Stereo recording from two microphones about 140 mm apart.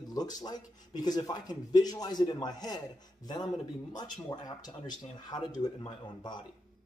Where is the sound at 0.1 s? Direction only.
25° left (ahead or behind).